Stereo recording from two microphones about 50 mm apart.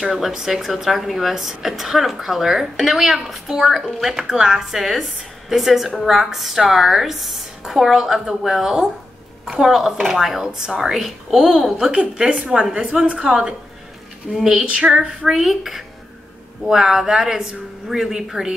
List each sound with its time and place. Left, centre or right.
0.0 s a woman's voice: centre
4.3 s a woman's voice: centre
11.8 s a woman's voice: centre
13.2 s a woman's voice: centre
14.6 s a woman's voice: right
15.3 s a woman's voice: centre